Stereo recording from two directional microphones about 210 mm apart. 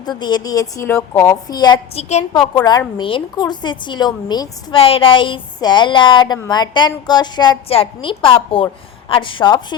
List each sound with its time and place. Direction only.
0.0 s a woman's voice: 20° left (ahead or behind)